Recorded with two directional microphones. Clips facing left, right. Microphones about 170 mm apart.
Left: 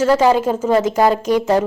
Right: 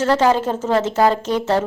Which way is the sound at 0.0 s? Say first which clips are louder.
Left 3 dB; 10° left (ahead or behind).